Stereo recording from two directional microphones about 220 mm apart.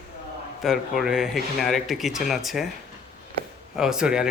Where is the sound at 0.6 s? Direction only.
Centre (ahead or behind).